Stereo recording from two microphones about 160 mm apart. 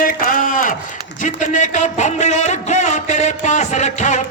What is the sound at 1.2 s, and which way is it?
A man's voice, 50° left (ahead or behind).